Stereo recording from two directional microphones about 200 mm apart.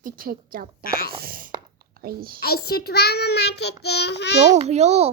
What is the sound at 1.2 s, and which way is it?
A child's voice, 45° right (ahead or behind).